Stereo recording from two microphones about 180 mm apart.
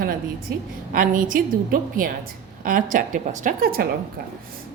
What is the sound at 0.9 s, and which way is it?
A woman's voice, 50° right (ahead or behind).